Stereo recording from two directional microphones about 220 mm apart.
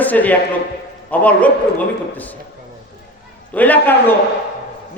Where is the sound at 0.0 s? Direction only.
5° left (ahead or behind).